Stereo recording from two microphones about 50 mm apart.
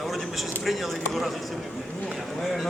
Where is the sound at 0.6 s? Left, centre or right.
Centre.